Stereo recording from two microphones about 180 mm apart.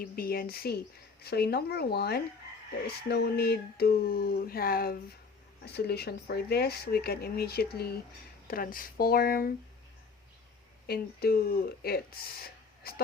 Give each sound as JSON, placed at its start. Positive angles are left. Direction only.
{"t": 0.0, "sound": "speech", "side_deg": 55}
{"t": 10.8, "sound": "speech", "side_deg": 60}